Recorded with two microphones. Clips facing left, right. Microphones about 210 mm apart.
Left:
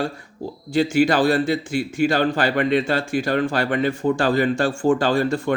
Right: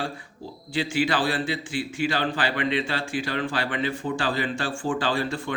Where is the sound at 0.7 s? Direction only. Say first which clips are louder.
Left 7 dB; 45° left (ahead or behind).